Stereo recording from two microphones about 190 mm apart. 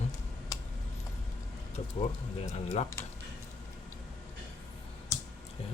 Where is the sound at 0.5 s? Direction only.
20° left (ahead or behind).